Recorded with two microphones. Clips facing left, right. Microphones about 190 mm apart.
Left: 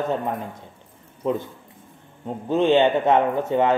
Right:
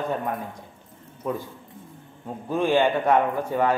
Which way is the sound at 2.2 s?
20° left (ahead or behind).